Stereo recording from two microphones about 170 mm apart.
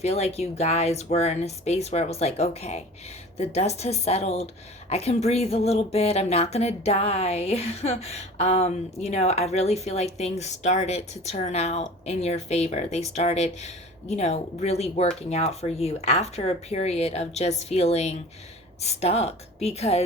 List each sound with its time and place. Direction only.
0.0 s speech: 40° left (ahead or behind)